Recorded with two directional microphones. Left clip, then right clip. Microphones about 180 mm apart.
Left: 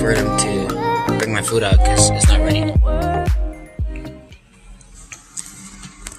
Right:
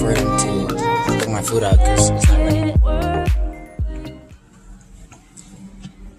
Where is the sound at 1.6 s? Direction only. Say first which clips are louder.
Right 1 dB; 15° right (ahead or behind).